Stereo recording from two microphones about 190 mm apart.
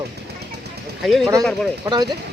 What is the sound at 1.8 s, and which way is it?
Speech, 20° right (ahead or behind).